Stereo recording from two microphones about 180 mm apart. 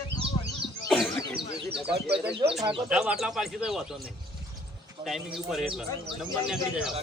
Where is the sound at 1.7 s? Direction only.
5° right (ahead or behind).